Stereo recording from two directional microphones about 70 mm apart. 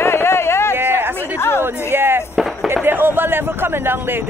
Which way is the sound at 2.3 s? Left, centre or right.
Centre.